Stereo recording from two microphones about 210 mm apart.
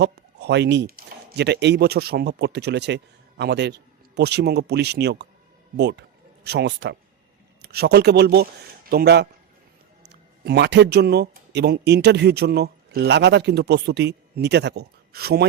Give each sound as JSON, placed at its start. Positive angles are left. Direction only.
{"t": 0.0, "sound": "a man's voice", "side_deg": -55}